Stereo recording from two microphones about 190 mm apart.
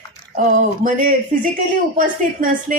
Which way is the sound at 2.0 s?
45° right (ahead or behind).